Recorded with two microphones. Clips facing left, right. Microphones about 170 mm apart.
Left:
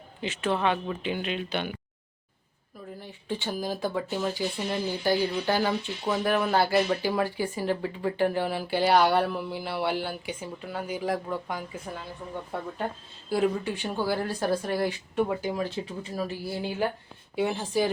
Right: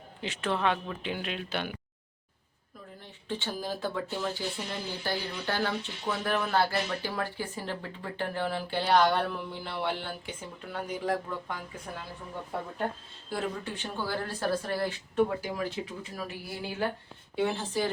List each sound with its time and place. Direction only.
0.2 s speech: 5° left (ahead or behind)
3.2 s speech: 15° left (ahead or behind)
13.3 s speech: 10° left (ahead or behind)
15.5 s speech: 30° left (ahead or behind)
17.3 s speech: 15° left (ahead or behind)